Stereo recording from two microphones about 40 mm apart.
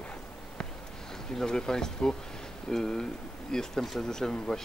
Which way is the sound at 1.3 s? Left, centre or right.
Centre.